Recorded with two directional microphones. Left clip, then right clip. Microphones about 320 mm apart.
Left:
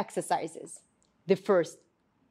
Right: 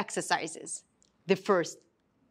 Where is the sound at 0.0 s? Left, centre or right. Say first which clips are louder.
Even; centre.